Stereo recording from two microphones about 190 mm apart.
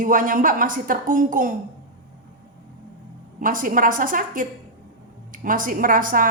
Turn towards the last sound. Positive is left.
turn(degrees=-45)  # may be behind; listen again after turning